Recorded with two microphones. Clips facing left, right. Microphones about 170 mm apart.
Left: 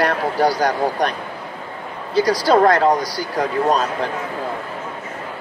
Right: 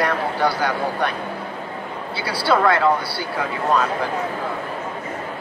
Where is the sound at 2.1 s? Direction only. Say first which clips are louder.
Left 6 dB; 40° left (ahead or behind).